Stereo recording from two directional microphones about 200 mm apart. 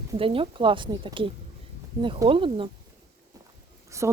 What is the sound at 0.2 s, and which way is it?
Speech, 25° right (ahead or behind).